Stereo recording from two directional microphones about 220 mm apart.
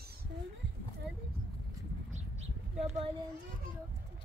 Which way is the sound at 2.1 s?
30° right (ahead or behind).